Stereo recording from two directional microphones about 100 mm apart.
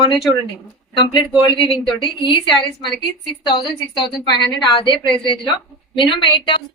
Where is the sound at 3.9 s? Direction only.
45° left (ahead or behind).